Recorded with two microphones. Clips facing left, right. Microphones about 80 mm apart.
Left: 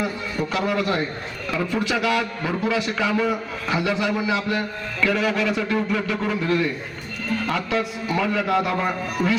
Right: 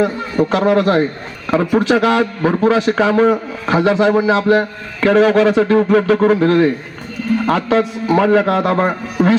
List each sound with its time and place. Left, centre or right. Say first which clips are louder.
0.0 s a man's voice: right 10 dB; right